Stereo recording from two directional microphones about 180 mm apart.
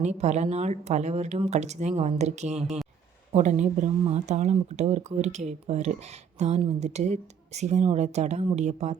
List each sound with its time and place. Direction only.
0.0 s speech: 40° right (ahead or behind)